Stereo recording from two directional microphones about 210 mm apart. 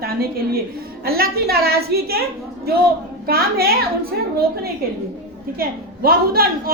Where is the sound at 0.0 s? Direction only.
45° right (ahead or behind).